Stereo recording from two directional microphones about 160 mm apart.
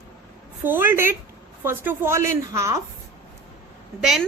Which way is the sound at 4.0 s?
Centre (ahead or behind).